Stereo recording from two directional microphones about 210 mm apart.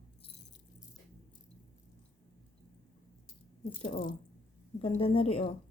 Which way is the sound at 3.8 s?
40° left (ahead or behind).